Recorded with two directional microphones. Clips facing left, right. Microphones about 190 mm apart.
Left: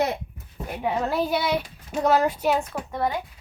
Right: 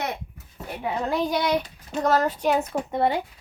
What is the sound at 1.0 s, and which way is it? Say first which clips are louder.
A child's voice: right 2 dB; 5° left (ahead or behind).